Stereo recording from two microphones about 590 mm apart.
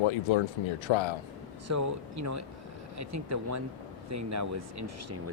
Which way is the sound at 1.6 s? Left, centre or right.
Right.